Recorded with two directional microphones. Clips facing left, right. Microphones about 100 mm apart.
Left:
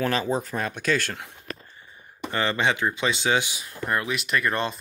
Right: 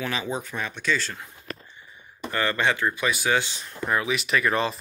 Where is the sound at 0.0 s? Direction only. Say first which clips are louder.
Left 5 dB; 45° left (ahead or behind); by 1.3 s 65° left (ahead or behind).